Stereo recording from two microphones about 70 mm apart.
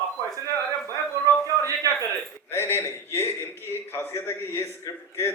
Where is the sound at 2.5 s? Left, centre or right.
Left.